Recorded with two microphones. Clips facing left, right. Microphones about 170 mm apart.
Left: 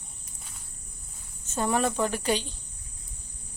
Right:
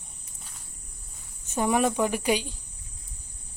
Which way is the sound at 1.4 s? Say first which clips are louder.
Right 2 dB; 15° right (ahead or behind).